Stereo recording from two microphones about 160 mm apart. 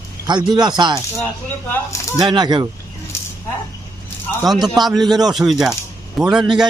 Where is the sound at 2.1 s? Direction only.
25° right (ahead or behind).